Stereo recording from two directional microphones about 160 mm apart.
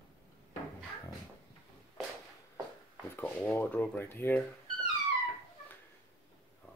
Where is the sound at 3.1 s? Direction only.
15° left (ahead or behind).